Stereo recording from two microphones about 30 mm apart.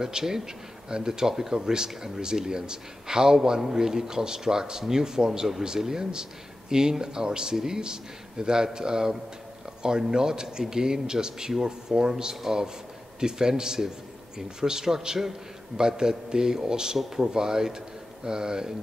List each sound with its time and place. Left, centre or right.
0.0 s speech: centre